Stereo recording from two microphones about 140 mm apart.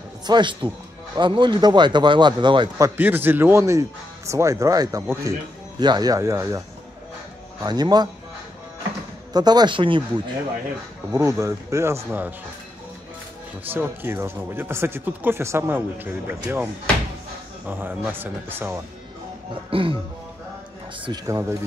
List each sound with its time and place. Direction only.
0.3 s speech: 35° right (ahead or behind)
3.0 s speech: 15° right (ahead or behind)
7.6 s speech: 30° right (ahead or behind)
9.3 s speech: 30° right (ahead or behind)
11.1 s speech: 20° right (ahead or behind)
13.7 s speech: 15° right (ahead or behind)
17.6 s speech: 15° right (ahead or behind)
19.7 s speech: 40° right (ahead or behind)
21.3 s speech: 20° right (ahead or behind)